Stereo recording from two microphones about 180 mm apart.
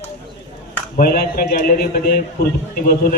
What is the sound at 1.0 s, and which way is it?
A man's voice, 55° left (ahead or behind).